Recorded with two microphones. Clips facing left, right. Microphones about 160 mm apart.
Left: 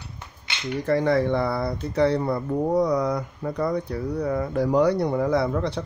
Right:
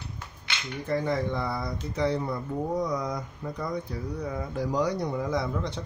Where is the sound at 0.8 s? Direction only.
75° left (ahead or behind).